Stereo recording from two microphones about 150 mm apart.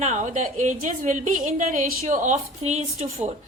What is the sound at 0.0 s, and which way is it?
A woman's voice, 55° right (ahead or behind).